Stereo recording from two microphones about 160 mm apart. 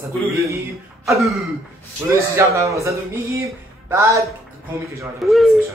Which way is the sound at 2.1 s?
20° right (ahead or behind).